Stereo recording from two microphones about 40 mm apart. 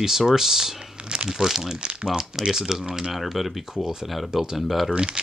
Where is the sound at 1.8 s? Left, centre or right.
Right.